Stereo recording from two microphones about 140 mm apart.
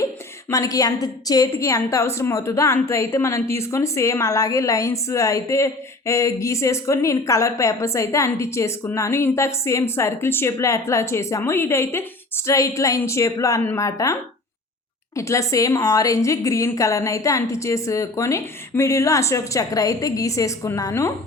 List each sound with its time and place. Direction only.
0.5 s a woman's voice: 25° left (ahead or behind)